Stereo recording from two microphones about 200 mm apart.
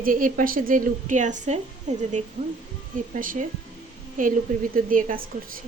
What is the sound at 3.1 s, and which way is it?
Speech, 45° right (ahead or behind).